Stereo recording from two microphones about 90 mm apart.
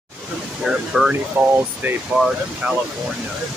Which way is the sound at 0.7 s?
5° right (ahead or behind).